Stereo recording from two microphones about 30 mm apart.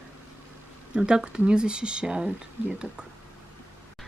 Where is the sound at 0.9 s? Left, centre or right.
Right.